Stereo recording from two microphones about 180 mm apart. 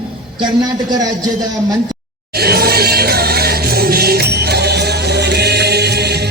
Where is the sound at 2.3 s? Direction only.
60° right (ahead or behind).